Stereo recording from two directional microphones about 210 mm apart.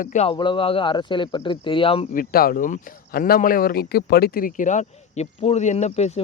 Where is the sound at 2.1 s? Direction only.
45° left (ahead or behind).